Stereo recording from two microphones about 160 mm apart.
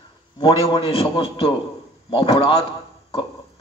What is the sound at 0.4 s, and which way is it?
A man's voice, 35° left (ahead or behind).